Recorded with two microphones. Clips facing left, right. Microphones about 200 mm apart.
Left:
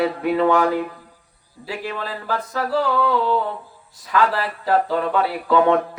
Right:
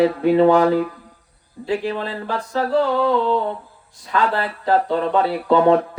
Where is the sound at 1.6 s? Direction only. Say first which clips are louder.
Right 6 dB; 30° right (ahead or behind).